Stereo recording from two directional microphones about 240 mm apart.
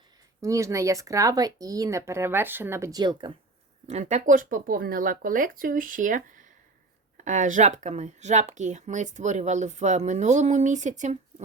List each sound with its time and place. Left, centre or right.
0.4 s speech: centre
3.8 s speech: right